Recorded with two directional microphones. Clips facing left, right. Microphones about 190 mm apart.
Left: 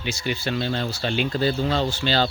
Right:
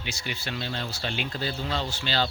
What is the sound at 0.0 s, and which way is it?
Speech, 35° left (ahead or behind).